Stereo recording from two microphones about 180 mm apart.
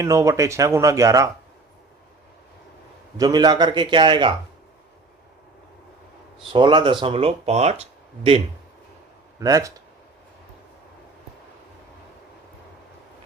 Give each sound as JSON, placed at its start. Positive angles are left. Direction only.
{"t": 0.0, "sound": "speech", "side_deg": -15}
{"t": 3.2, "sound": "a man's voice", "side_deg": -25}
{"t": 6.5, "sound": "speech", "side_deg": -25}
{"t": 9.4, "sound": "a man's voice", "side_deg": -20}